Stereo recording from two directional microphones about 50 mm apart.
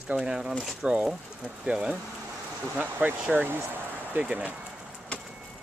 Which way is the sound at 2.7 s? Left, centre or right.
Right.